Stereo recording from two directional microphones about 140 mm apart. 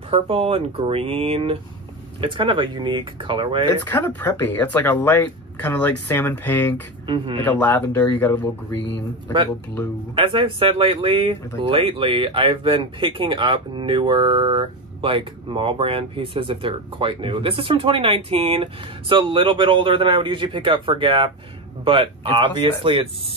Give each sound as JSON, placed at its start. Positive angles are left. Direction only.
{"t": 0.1, "sound": "speech", "side_deg": -40}
{"t": 3.8, "sound": "speech", "side_deg": 15}
{"t": 7.1, "sound": "speech", "side_deg": -40}
{"t": 7.4, "sound": "speech", "side_deg": 15}
{"t": 10.1, "sound": "speech", "side_deg": -40}